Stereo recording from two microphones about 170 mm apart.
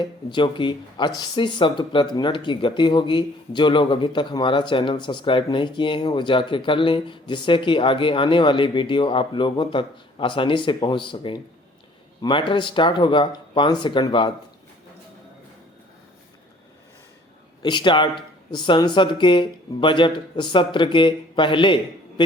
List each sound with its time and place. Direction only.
0.0 s speech: 30° left (ahead or behind)
17.6 s speech: 25° left (ahead or behind)